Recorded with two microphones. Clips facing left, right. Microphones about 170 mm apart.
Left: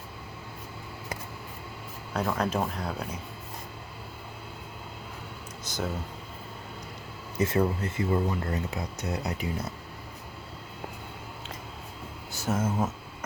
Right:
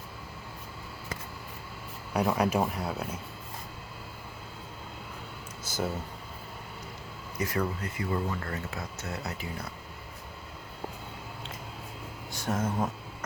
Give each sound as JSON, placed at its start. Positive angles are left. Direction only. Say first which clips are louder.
{"t": 2.1, "sound": "speech", "louder": "right 2 dB", "side_deg": -10}
{"t": 5.6, "sound": "a sound", "louder": "right 1 dB", "side_deg": -5}
{"t": 7.3, "sound": "speech", "louder": "left 5 dB", "side_deg": 25}
{"t": 12.3, "sound": "speech", "louder": "left 2 dB", "side_deg": 5}